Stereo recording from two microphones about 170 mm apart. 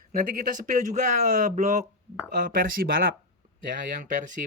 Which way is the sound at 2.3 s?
55° right (ahead or behind).